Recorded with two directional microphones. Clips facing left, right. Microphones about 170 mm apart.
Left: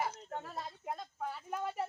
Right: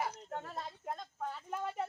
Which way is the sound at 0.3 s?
Centre (ahead or behind).